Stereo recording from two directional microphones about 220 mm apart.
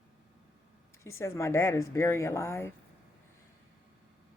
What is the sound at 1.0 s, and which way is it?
Speech, 10° left (ahead or behind).